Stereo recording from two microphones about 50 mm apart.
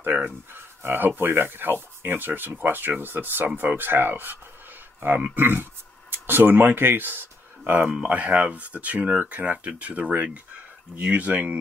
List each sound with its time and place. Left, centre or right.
0.0 s speech: right
7.8 s speech: right